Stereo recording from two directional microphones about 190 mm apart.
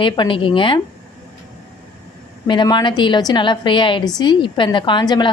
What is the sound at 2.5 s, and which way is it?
A woman's voice, 25° left (ahead or behind).